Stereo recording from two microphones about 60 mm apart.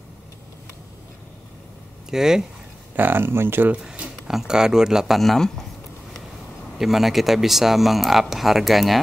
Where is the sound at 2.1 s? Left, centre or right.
Centre.